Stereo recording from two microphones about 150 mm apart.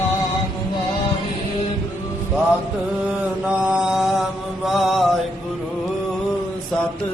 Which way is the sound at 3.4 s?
5° right (ahead or behind).